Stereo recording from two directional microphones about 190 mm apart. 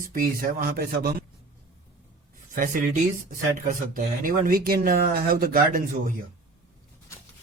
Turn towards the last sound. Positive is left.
turn(degrees=-45)  # may be behind; listen again after turning